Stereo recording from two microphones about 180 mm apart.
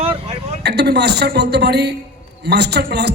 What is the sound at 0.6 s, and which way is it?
A woman's voice, 65° right (ahead or behind).